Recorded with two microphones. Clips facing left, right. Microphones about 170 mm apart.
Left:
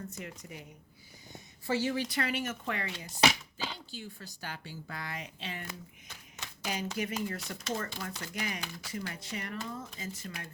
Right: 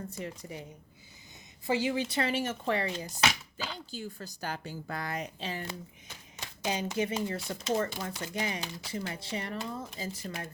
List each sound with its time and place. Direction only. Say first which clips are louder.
0.1 s speech: right 4 dB; 35° right (ahead or behind)
1.3 s a sound: right 2 dB; 15° right (ahead or behind)
2.1 s speech: right 3 dB; 30° right (ahead or behind)
6.6 s speech: right 4 dB; 25° right (ahead or behind)